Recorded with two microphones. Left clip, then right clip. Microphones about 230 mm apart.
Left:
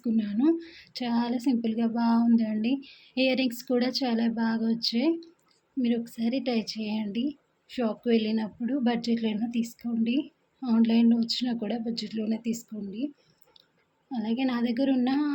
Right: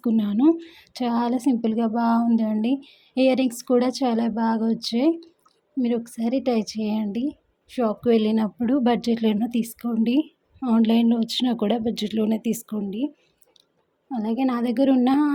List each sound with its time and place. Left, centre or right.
0.0 s a woman's voice: right
14.1 s speech: right